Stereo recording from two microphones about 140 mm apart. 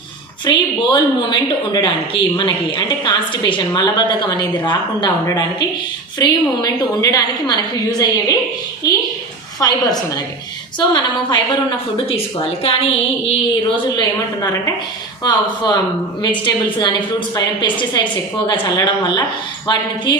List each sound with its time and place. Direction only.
0.4 s a woman's voice: 35° left (ahead or behind)
9.6 s a woman's voice: 25° left (ahead or behind)
12.6 s speech: 45° left (ahead or behind)
13.9 s a woman's voice: 30° left (ahead or behind)